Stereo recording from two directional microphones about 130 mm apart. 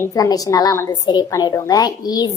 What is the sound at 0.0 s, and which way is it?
A woman's voice, 25° left (ahead or behind).